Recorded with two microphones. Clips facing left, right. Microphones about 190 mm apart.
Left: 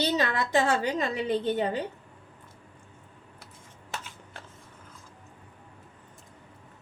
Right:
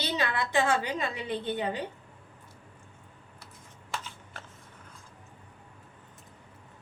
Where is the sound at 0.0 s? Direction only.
40° left (ahead or behind).